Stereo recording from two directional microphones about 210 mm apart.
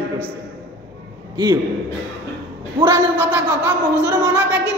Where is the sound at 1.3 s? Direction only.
20° right (ahead or behind).